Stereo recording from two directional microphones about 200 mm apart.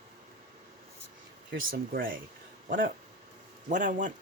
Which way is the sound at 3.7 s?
40° right (ahead or behind).